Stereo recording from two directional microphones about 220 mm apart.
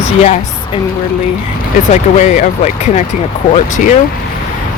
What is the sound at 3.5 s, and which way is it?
Speech, 35° left (ahead or behind).